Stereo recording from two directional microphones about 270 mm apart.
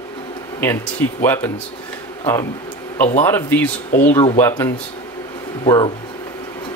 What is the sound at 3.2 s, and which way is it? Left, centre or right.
Speech, centre.